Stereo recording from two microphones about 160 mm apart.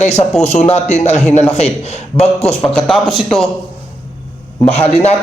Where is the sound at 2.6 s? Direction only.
5° left (ahead or behind).